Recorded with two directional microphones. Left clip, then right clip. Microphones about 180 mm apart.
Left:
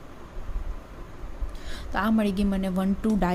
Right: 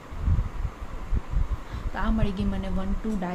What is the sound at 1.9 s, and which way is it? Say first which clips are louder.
A woman's voice: left 5 dB; 50° left (ahead or behind).